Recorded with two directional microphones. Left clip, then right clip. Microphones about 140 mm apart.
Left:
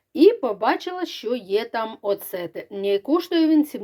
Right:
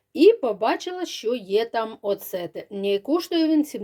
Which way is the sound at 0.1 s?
25° right (ahead or behind).